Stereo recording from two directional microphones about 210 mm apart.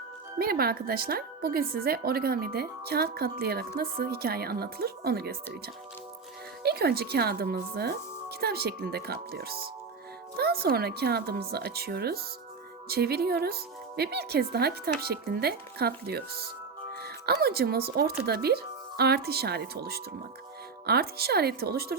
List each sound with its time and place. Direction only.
0.3 s speech: 45° right (ahead or behind)
6.6 s speech: 50° right (ahead or behind)